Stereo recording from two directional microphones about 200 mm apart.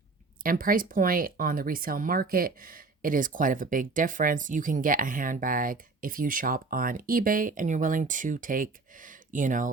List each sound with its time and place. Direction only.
0.4 s speech: 45° right (ahead or behind)